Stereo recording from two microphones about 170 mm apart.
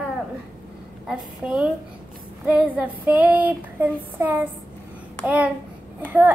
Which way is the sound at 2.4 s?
5° right (ahead or behind).